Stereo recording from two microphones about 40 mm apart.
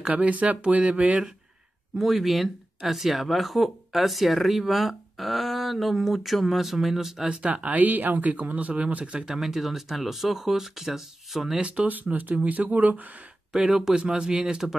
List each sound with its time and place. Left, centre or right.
0.1 s speech: right
2.0 s speech: centre
7.4 s speech: right
9.2 s speech: centre
11.9 s speech: right
13.5 s speech: centre